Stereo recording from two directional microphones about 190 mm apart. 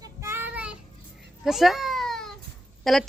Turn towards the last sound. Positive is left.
turn(degrees=0)  # may be behind; listen again after turning